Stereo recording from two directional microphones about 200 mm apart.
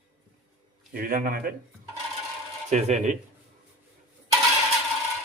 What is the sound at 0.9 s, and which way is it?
Speech, 45° right (ahead or behind).